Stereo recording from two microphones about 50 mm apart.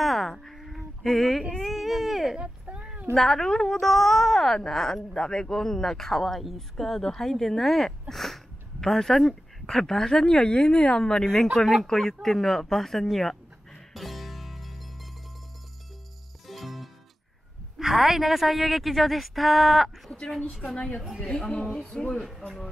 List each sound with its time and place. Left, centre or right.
0.0 s a sound: centre
1.6 s baby cry: centre
3.2 s a woman's voice: centre
8.1 s a sound: centre
8.8 s a woman's voice: centre
13.9 s music: centre
16.4 s music: centre
17.7 s a woman's voice: centre
20.6 s a woman's voice: centre